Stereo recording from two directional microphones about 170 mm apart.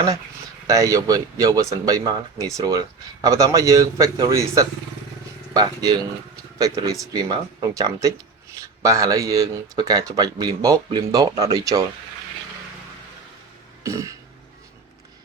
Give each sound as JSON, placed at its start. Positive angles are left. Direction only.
{"t": 0.7, "sound": "speech", "side_deg": -20}
{"t": 13.8, "sound": "throat clearing", "side_deg": -20}